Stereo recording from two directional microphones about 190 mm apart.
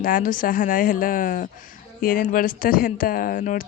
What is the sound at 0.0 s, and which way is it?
A woman's voice, 45° left (ahead or behind).